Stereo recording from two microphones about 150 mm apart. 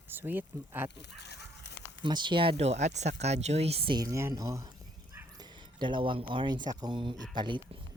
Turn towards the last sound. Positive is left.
turn(degrees=-30)  # may be behind; listen again after turning